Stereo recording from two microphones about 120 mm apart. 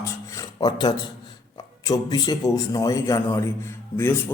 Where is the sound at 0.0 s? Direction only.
30° left (ahead or behind).